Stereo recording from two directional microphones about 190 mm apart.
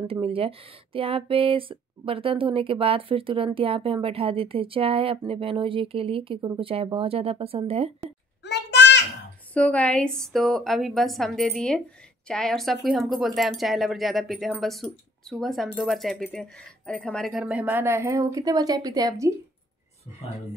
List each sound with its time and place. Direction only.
0.1 s speech: 30° right (ahead or behind)
8.5 s a sound: 65° left (ahead or behind)
9.5 s speech: 5° left (ahead or behind); by 19.3 s 20° right (ahead or behind)